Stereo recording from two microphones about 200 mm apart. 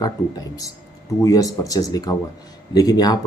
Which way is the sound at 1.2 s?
15° left (ahead or behind).